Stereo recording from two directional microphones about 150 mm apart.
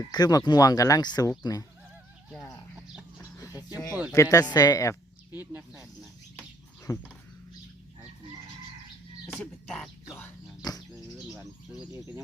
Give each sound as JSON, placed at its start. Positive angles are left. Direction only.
{"t": 0.1, "sound": "speech", "side_deg": 25}
{"t": 3.3, "sound": "a sound", "side_deg": 20}
{"t": 4.1, "sound": "speech", "side_deg": 20}
{"t": 6.9, "sound": "speech", "side_deg": 25}
{"t": 9.3, "sound": "a sound", "side_deg": 0}
{"t": 10.6, "sound": "bird", "side_deg": 25}
{"t": 11.9, "sound": "bird", "side_deg": -20}